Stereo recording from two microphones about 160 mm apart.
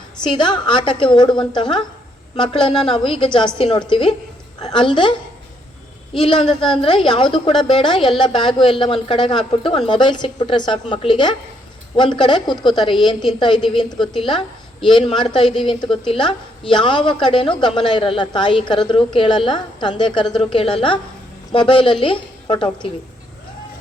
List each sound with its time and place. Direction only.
0.2 s a woman's voice: 30° left (ahead or behind)
6.1 s a woman's voice: 35° left (ahead or behind)